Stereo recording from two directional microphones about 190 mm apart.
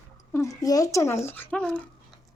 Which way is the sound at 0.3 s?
15° left (ahead or behind).